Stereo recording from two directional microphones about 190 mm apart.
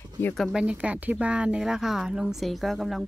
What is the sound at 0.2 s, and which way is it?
Speech, 5° left (ahead or behind).